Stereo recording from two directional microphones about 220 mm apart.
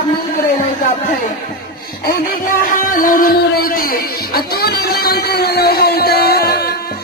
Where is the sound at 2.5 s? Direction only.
40° left (ahead or behind).